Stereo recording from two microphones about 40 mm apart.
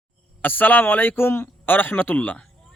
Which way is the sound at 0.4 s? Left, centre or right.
Left.